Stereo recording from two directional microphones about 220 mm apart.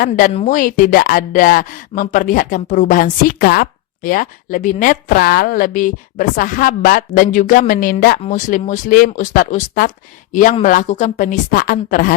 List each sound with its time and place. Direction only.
0.3 s speech: 35° left (ahead or behind)